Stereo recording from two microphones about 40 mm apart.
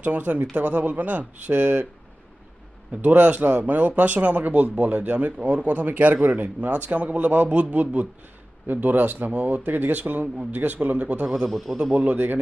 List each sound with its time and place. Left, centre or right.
0.0 s speech: right
3.0 s speech: right
8.6 s speech: right
10.9 s speech: right
11.4 s a man's voice: centre
12.1 s speech: right